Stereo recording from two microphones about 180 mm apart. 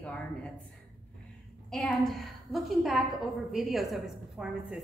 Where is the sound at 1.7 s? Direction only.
5° left (ahead or behind).